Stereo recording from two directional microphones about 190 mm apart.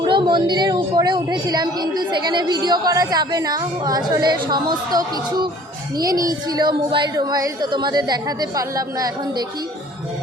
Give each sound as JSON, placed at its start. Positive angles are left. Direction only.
{"t": 0.0, "sound": "a woman's voice", "side_deg": -25}